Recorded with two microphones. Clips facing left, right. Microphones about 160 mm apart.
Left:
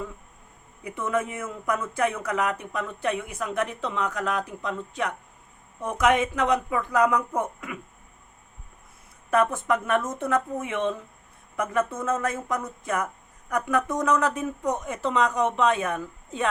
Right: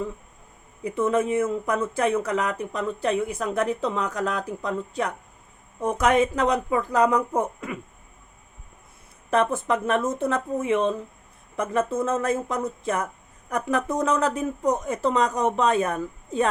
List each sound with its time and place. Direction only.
0.9 s speech: 30° right (ahead or behind)
9.3 s speech: 30° right (ahead or behind)